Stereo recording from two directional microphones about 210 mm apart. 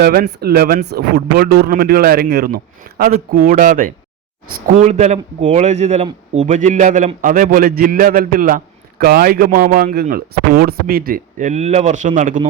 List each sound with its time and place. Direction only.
0.0 s a man's voice: 50° right (ahead or behind)